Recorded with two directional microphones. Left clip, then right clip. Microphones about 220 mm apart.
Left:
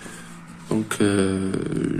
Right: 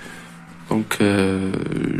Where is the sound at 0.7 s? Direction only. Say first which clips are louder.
Right 3 dB; 20° right (ahead or behind).